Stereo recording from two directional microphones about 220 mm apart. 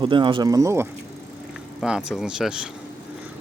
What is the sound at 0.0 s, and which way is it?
Speech, 20° right (ahead or behind).